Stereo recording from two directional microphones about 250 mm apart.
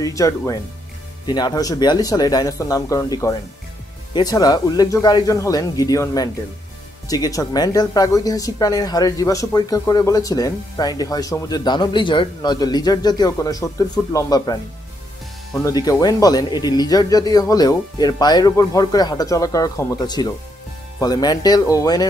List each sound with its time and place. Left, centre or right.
0.0 s speech: centre
15.6 s speech: centre